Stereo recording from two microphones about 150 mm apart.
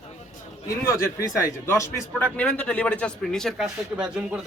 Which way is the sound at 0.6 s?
20° left (ahead or behind).